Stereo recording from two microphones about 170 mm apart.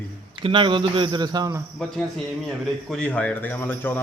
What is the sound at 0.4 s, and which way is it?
Speech, 30° right (ahead or behind).